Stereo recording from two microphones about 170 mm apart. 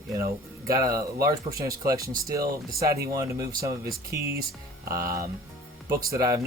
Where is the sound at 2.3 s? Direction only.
60° right (ahead or behind).